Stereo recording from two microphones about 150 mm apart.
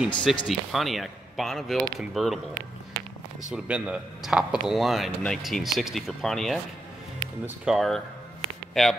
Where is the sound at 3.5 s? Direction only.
10° right (ahead or behind).